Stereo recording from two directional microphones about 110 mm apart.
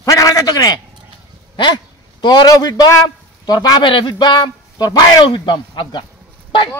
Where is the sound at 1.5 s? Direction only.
45° left (ahead or behind).